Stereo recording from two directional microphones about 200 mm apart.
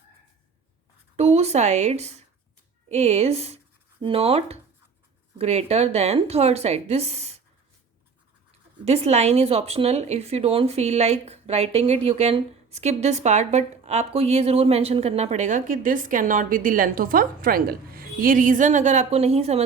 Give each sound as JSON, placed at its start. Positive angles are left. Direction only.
{"t": 1.1, "sound": "speech", "side_deg": -30}
{"t": 8.8, "sound": "speech", "side_deg": -30}